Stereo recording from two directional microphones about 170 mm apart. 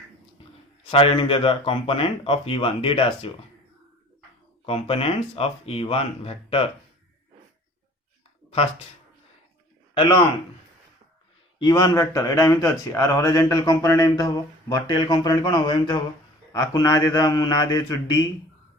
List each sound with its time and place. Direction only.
0.9 s speech: 35° left (ahead or behind)
4.6 s speech: 35° left (ahead or behind)
9.9 s a man's voice: 30° left (ahead or behind)
11.6 s speech: 20° left (ahead or behind)